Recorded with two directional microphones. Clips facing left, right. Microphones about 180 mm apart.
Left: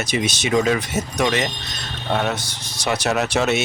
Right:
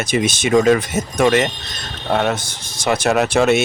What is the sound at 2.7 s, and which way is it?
Speech, 50° right (ahead or behind).